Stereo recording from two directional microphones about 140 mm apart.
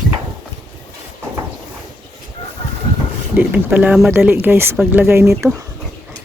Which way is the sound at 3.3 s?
10° right (ahead or behind).